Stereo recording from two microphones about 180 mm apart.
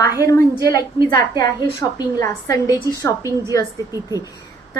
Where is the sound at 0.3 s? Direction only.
15° left (ahead or behind).